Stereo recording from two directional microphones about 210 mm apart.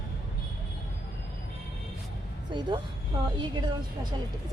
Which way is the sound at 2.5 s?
20° right (ahead or behind).